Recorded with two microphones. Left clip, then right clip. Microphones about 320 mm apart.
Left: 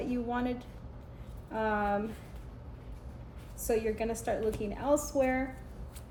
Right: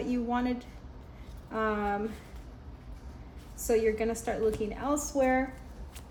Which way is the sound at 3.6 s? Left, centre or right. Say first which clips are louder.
Right 4 dB; right.